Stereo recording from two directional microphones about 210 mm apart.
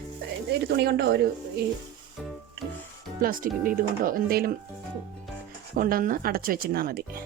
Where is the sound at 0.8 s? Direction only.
50° right (ahead or behind).